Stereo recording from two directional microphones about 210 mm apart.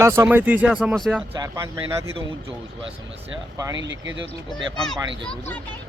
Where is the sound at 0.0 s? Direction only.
10° right (ahead or behind).